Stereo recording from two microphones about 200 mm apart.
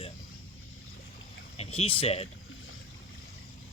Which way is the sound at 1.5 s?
30° left (ahead or behind).